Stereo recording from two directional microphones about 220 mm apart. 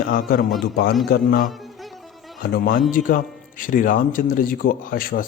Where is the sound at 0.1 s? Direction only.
40° left (ahead or behind).